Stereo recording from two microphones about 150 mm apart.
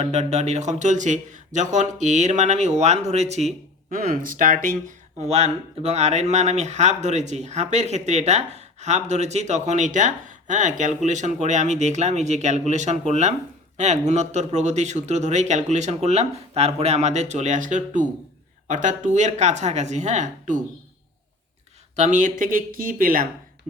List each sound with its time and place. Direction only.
0.0 s speech: 45° right (ahead or behind)
3.9 s speech: 70° right (ahead or behind)
4.9 s speech: 45° right (ahead or behind)
21.9 s speech: 55° right (ahead or behind)